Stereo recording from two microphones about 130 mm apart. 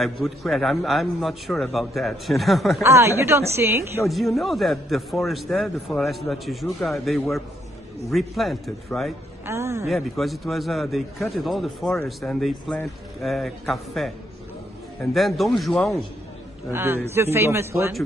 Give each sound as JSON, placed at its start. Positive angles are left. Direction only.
{"t": 0.0, "sound": "a man's voice", "side_deg": 0}
{"t": 2.8, "sound": "a woman's voice", "side_deg": -20}
{"t": 4.0, "sound": "a man's voice", "side_deg": 0}
{"t": 9.5, "sound": "a woman's voice", "side_deg": -20}
{"t": 10.1, "sound": "a man's voice", "side_deg": 0}
{"t": 16.7, "sound": "a man's voice", "side_deg": -20}